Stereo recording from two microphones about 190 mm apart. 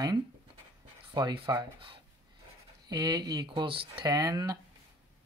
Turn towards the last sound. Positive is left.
turn(degrees=-20)  # may be behind; listen again after turning